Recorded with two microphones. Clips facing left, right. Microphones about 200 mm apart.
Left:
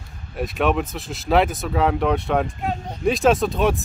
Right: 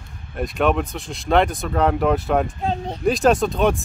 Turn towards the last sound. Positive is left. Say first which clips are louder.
# right 1 dB
turn(degrees=0)  # may be behind; listen again after turning